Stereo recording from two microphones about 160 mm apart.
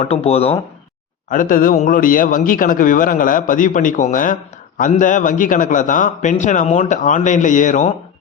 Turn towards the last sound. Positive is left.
turn(degrees=50)  # may be behind; listen again after turning